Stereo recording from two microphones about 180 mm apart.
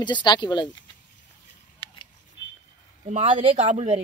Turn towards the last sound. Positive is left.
turn(degrees=-40)  # may be behind; listen again after turning